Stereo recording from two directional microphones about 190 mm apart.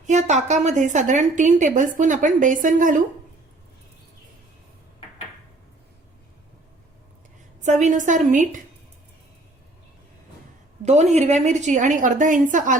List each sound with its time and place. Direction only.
0.1 s a woman's voice: 40° right (ahead or behind)
7.6 s a woman's voice: 40° right (ahead or behind)
10.8 s a woman's voice: 35° right (ahead or behind)